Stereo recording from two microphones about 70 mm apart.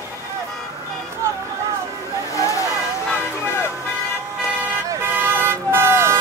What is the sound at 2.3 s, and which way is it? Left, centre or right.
Vehicle, left.